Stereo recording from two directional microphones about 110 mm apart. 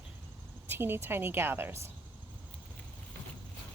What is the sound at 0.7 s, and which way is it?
Speech, 20° right (ahead or behind).